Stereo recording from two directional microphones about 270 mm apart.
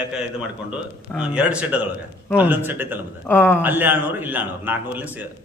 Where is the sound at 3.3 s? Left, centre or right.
Centre.